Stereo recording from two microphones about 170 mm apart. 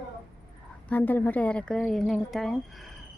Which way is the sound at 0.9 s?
10° left (ahead or behind).